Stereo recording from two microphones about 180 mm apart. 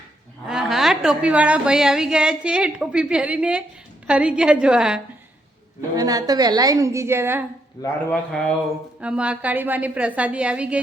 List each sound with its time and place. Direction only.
0.4 s a woman's voice: centre (ahead or behind)
6.0 s a woman's voice: 20° right (ahead or behind)
7.8 s a man's voice: 20° left (ahead or behind)
8.1 s a woman's voice: 5° left (ahead or behind)
9.0 s a woman's voice: 5° right (ahead or behind)